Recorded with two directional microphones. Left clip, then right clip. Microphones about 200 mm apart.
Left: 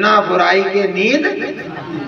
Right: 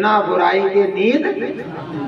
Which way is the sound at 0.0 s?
40° left (ahead or behind).